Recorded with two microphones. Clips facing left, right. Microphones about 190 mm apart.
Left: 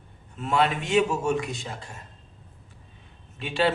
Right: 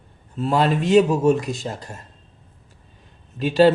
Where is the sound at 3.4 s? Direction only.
40° right (ahead or behind).